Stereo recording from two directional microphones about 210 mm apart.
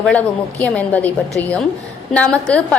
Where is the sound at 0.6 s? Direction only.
5° left (ahead or behind).